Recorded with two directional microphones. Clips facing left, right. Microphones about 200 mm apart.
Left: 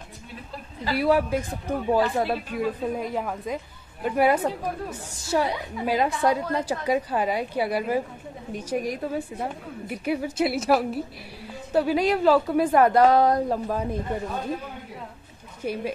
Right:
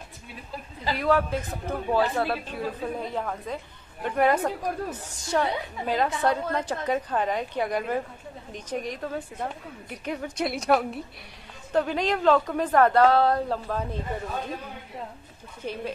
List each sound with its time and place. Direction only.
0.9 s a woman's voice: 10° left (ahead or behind)
15.6 s a woman's voice: 10° left (ahead or behind)